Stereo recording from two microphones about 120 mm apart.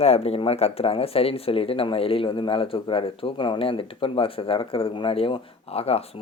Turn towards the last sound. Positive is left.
turn(degrees=55)  # may be behind; listen again after turning